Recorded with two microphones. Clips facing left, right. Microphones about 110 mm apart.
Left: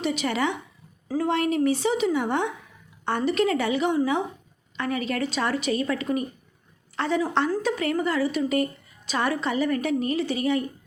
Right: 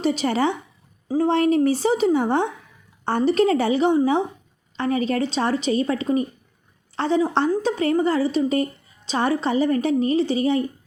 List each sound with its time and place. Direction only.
0.0 s a woman's voice: 35° right (ahead or behind)